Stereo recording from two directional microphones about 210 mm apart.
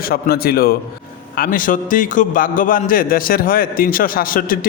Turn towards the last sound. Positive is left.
turn(degrees=45)  # may be behind; listen again after turning